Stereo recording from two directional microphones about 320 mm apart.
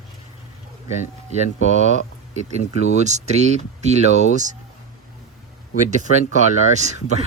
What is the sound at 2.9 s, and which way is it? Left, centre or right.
Speech, right.